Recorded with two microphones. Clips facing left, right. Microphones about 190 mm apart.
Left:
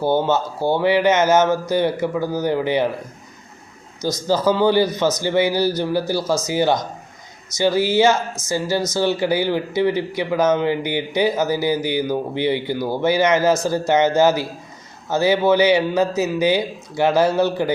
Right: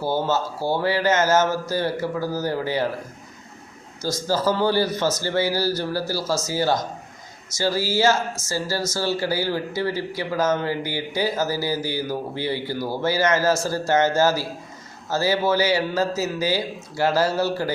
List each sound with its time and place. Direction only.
0.6 s speech: 20° left (ahead or behind)
4.3 s speech: 15° left (ahead or behind)